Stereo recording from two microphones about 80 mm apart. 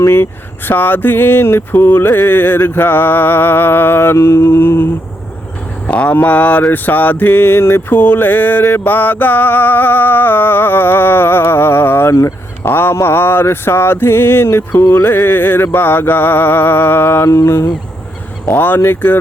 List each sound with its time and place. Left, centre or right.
0.0 s mantra: left
5.9 s mantra: centre; by 17.7 s left
18.5 s mantra: left